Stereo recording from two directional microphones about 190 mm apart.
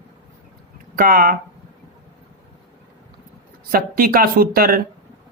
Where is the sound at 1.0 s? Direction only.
50° right (ahead or behind).